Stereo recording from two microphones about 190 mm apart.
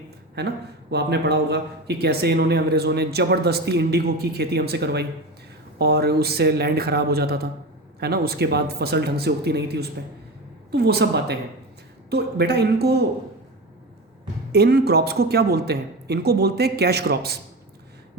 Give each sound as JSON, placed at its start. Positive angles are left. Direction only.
{"t": 0.3, "sound": "a man's voice", "side_deg": -60}
{"t": 10.7, "sound": "a man's voice", "side_deg": -60}
{"t": 14.5, "sound": "a man's voice", "side_deg": -55}